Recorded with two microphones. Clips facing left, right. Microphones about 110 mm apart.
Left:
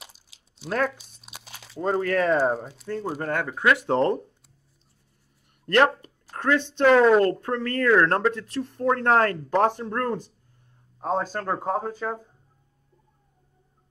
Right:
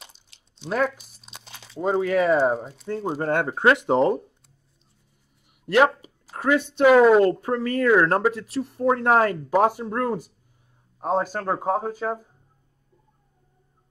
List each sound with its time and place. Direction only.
0.0 s crunch: 5° left (ahead or behind)
3.1 s speech: 25° right (ahead or behind)
3.8 s speech: 10° right (ahead or behind)
5.7 s speech: 5° right (ahead or behind)